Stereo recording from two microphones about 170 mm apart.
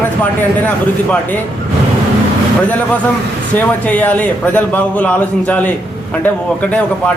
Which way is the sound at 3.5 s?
10° left (ahead or behind).